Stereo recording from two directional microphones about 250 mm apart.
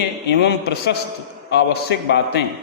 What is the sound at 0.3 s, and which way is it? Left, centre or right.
A man's voice, left.